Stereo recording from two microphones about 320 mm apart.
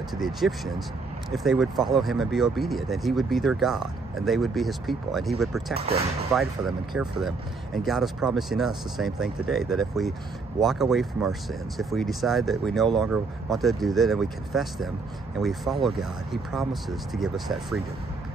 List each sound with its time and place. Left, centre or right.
0.2 s speech: centre
5.8 s speech: centre
6.3 s speech: centre